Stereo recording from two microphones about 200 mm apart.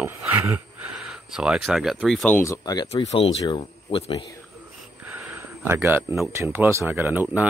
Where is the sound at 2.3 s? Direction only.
15° left (ahead or behind).